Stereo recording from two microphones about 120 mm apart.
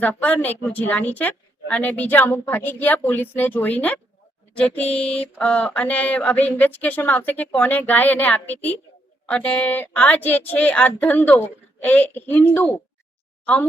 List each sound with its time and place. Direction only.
0.0 s a woman's voice: 10° left (ahead or behind)